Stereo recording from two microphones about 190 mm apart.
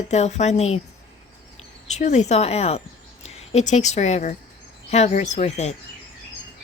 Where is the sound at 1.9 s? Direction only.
35° left (ahead or behind).